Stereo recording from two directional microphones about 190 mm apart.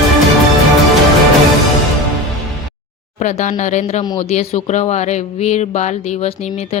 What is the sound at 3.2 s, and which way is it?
A woman's voice, 40° left (ahead or behind).